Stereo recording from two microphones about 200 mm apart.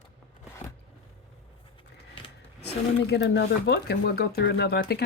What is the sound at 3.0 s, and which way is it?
Speech, 60° left (ahead or behind).